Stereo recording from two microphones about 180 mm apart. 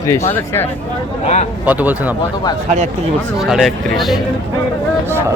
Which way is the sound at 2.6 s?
40° right (ahead or behind).